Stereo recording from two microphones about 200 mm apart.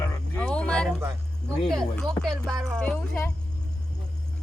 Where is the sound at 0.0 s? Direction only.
5° left (ahead or behind).